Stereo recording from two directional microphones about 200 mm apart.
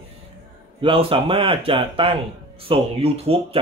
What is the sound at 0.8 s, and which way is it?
Speech, 30° right (ahead or behind).